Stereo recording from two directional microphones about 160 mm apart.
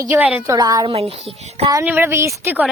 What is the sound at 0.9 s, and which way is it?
Speech, 40° right (ahead or behind).